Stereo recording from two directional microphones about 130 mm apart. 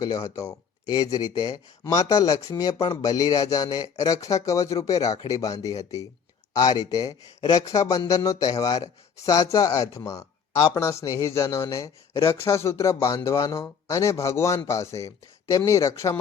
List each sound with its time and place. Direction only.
0.0 s speech: 25° left (ahead or behind)